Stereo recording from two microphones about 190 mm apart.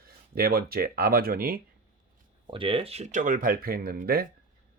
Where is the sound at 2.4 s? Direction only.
25° right (ahead or behind); by 4.3 s 55° right (ahead or behind).